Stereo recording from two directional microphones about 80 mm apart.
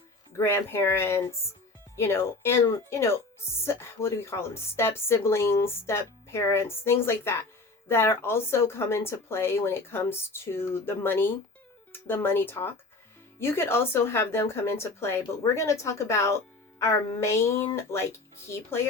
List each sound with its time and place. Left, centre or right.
0.3 s speech: left